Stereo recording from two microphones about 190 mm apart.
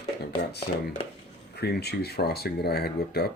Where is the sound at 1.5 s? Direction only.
60° left (ahead or behind).